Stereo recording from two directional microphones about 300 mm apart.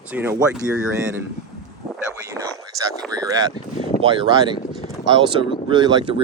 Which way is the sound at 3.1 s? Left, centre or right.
Centre.